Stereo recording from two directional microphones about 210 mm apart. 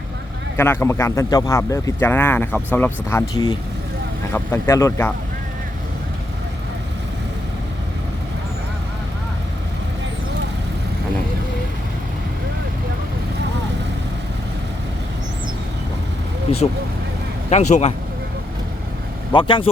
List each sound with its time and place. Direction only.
0.5 s speech: 10° left (ahead or behind)
17.5 s a man's voice: 35° left (ahead or behind)
19.3 s speech: 25° left (ahead or behind)